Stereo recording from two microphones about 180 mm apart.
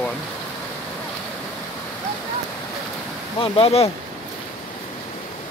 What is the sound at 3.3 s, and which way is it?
Speech, 30° left (ahead or behind).